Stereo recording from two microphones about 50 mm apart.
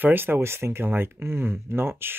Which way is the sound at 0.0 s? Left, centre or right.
Right.